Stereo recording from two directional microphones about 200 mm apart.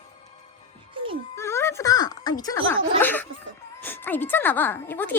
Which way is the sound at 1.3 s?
15° left (ahead or behind).